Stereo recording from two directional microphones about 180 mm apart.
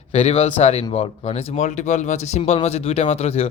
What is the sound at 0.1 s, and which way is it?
Speech, 35° left (ahead or behind).